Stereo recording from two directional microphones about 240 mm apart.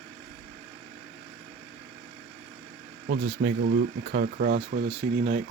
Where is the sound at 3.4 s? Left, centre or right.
Right.